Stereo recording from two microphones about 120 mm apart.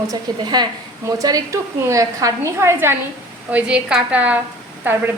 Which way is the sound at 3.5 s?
10° right (ahead or behind).